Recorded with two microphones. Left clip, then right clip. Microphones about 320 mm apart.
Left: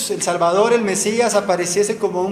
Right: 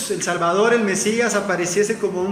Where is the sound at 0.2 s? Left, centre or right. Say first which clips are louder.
Left 3 dB; centre.